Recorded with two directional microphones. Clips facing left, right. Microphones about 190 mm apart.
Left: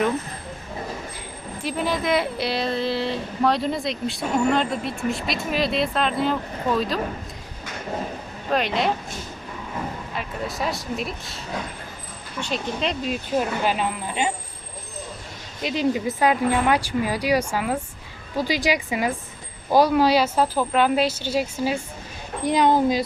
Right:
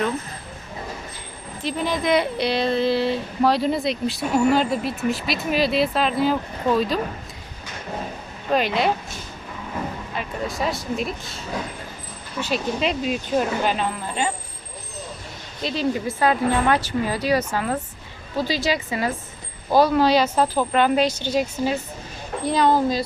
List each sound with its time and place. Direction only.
1.6 s a woman's voice: 5° left (ahead or behind)
8.4 s a woman's voice: centre (ahead or behind)
10.2 s a woman's voice: centre (ahead or behind)
12.4 s a woman's voice: 5° right (ahead or behind); by 14.3 s 15° left (ahead or behind)
15.6 s speech: 15° left (ahead or behind)